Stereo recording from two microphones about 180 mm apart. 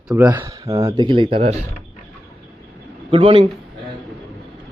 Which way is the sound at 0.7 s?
25° right (ahead or behind).